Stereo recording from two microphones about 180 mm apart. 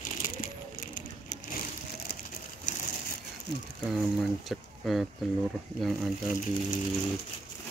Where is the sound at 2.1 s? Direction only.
60° left (ahead or behind).